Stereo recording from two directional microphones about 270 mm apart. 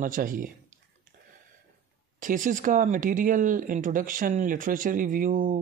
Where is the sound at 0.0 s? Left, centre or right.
Right.